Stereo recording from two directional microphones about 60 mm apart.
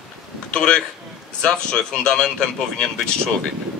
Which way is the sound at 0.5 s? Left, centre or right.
Centre.